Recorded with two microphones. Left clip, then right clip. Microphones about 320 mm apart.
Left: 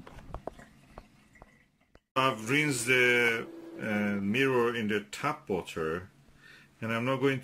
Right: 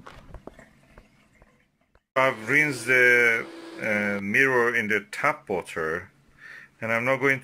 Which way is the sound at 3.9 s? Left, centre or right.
Centre.